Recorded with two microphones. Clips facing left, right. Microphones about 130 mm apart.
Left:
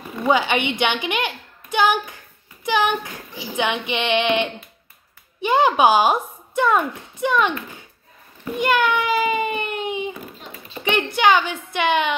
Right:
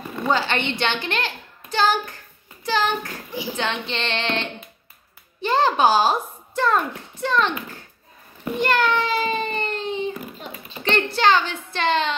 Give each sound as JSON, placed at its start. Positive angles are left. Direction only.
{"t": 0.3, "sound": "a woman's voice", "side_deg": 15}
{"t": 8.5, "sound": "a child's voice", "side_deg": 10}